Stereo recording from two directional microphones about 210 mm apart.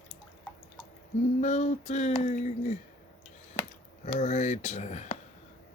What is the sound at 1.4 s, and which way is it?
Speech, 35° left (ahead or behind).